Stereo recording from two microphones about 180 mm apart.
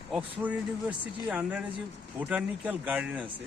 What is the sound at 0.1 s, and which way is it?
Speech, 10° right (ahead or behind).